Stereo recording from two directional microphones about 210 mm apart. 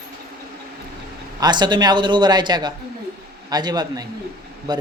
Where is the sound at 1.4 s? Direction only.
20° right (ahead or behind).